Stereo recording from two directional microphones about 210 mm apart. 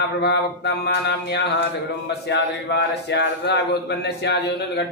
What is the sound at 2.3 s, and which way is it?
Male singing, 55° left (ahead or behind).